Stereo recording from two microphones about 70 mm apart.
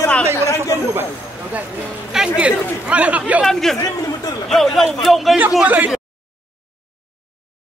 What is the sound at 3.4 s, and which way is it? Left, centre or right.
A man's voice, centre.